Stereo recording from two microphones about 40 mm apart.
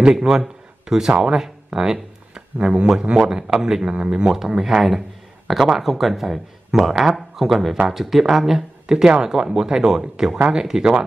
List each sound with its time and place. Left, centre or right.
0.1 s a man's voice: centre
2.3 s a sound: centre
3.0 s speech: right
4.3 s speech: centre